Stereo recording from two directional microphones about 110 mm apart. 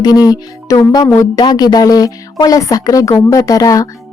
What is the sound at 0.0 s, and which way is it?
Music, 35° left (ahead or behind).